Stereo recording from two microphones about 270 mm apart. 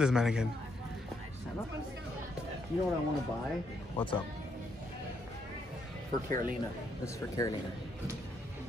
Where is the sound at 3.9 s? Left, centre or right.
Centre.